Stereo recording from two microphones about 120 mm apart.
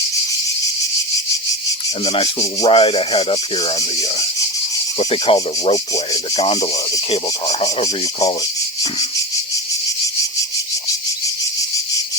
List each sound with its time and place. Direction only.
2.6 s speech: 50° left (ahead or behind)
4.9 s speech: 50° left (ahead or behind)